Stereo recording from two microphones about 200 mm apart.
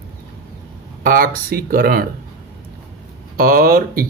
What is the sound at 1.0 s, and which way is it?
Speech, 45° right (ahead or behind).